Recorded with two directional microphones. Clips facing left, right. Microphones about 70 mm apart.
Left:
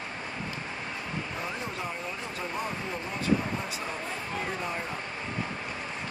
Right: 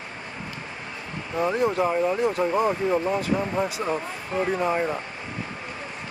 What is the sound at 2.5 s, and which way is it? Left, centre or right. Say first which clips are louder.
Speech: right 12 dB; right.